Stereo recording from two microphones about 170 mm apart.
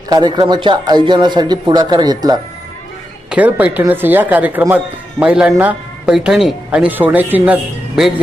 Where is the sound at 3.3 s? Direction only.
10° right (ahead or behind).